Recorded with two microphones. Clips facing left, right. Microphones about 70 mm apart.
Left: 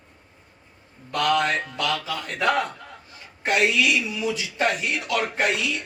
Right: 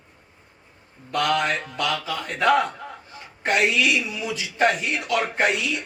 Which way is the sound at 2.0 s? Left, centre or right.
Right.